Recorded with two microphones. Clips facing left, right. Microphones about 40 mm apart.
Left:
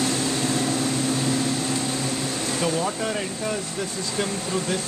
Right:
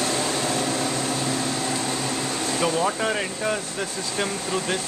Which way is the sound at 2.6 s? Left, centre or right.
Right.